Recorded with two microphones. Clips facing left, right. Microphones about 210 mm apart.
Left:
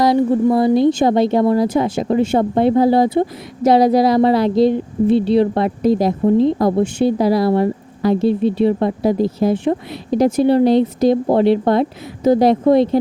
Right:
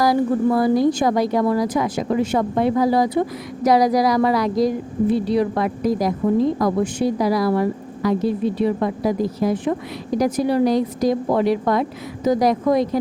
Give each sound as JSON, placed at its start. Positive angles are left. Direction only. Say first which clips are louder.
{"t": 0.0, "sound": "speech", "louder": "left 4 dB", "side_deg": 25}